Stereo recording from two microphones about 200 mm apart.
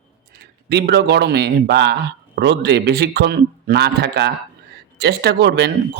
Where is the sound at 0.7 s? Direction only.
55° right (ahead or behind).